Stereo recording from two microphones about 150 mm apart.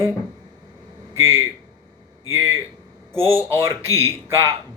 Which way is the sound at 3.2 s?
15° right (ahead or behind).